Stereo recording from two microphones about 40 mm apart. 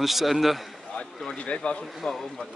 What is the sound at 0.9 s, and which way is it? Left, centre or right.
Speech, left.